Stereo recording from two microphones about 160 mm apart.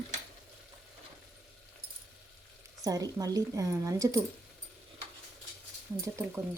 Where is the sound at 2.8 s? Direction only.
20° right (ahead or behind).